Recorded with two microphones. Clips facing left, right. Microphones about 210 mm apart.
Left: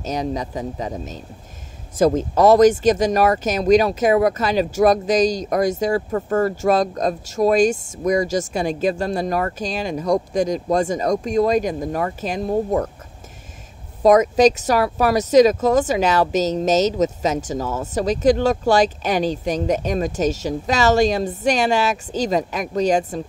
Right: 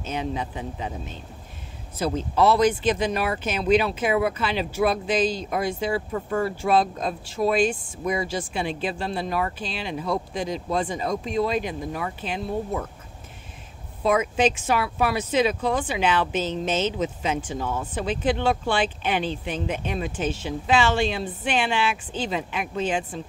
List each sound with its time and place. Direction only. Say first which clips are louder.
0.0 s speech: left 5 dB; 40° left (ahead or behind)
14.0 s speech: left 8 dB; 40° left (ahead or behind)